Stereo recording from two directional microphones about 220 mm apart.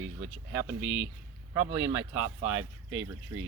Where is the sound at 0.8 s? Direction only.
20° left (ahead or behind).